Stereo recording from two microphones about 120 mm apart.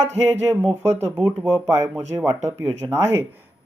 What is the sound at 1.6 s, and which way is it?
Speech, 25° right (ahead or behind).